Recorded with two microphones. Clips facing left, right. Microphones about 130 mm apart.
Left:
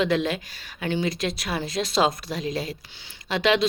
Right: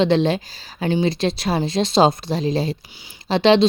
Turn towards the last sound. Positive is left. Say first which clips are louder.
# right 7 dB
turn(degrees=-30)  # may be behind; listen again after turning